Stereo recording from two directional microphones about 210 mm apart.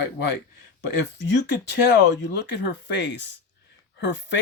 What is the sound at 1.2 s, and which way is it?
Speech, 55° left (ahead or behind).